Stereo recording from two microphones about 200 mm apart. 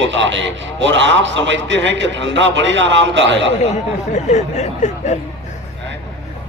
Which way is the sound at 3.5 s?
35° left (ahead or behind).